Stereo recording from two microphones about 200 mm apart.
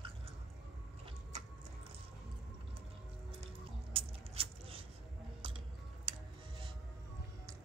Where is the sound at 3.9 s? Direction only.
30° right (ahead or behind).